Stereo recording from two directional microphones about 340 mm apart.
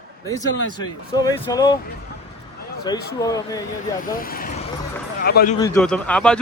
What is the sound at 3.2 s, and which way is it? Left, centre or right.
Speech, centre.